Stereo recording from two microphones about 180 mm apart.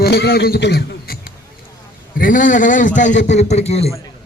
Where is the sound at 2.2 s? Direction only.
50° left (ahead or behind).